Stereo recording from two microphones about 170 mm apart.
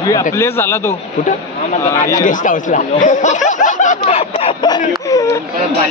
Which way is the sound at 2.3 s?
50° left (ahead or behind).